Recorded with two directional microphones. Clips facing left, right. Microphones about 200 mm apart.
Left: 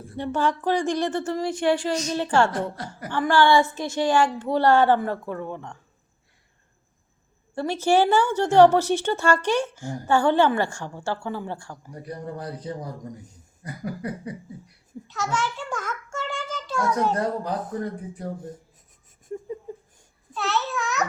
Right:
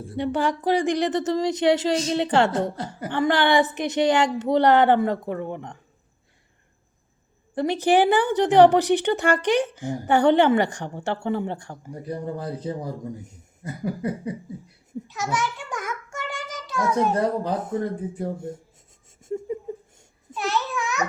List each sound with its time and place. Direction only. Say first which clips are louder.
0.2 s a woman's voice: right 1 dB; 15° right (ahead or behind)
7.5 s a woman's voice: right 1 dB; 15° right (ahead or behind)
15.0 s child singing: even; 15° right (ahead or behind)
16.9 s a woman's voice: right 3 dB; 25° right (ahead or behind)
20.3 s babbling: right 1 dB; 15° right (ahead or behind)